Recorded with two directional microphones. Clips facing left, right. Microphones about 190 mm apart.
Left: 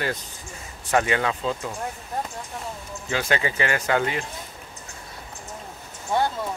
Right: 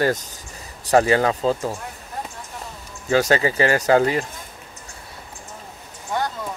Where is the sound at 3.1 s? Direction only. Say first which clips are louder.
Right 7 dB; 40° right (ahead or behind).